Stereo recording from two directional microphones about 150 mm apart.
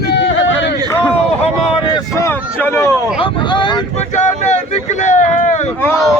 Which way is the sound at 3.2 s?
35° left (ahead or behind).